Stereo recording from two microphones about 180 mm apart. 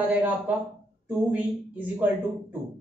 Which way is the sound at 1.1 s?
10° right (ahead or behind).